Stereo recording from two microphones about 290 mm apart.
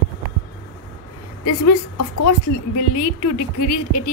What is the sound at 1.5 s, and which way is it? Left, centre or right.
Speech, left.